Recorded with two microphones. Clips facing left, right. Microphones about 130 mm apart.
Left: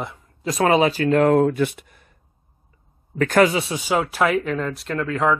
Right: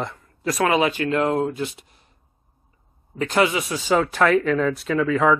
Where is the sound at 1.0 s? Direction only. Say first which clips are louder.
Left 5 dB; 55° left (ahead or behind).